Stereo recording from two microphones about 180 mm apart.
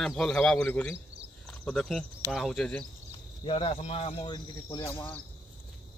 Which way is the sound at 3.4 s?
30° left (ahead or behind).